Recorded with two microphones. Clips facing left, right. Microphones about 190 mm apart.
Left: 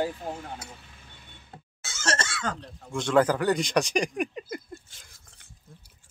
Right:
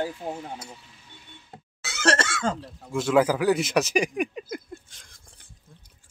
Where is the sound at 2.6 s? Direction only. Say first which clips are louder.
Right 4 dB; 5° right (ahead or behind).